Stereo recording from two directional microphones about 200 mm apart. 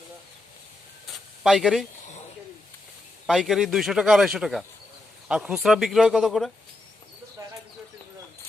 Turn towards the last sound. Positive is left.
turn(degrees=-15)  # may be behind; listen again after turning